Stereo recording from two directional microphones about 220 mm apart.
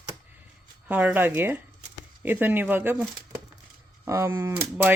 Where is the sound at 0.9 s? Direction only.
5° right (ahead or behind).